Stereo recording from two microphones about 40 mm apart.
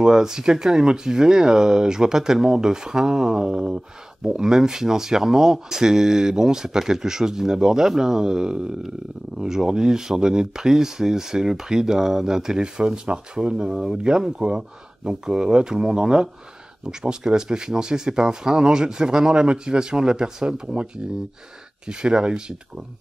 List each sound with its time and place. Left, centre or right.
0.0 s speech: centre
13.7 s speech: centre